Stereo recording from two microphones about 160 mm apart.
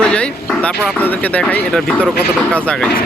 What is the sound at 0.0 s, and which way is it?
Speech, 5° left (ahead or behind).